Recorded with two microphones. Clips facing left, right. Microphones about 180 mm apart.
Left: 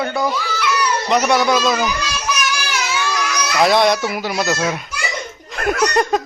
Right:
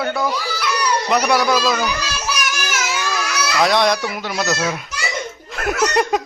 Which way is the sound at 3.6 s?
5° left (ahead or behind).